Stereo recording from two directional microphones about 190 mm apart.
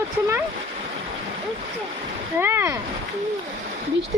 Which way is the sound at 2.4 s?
15° right (ahead or behind).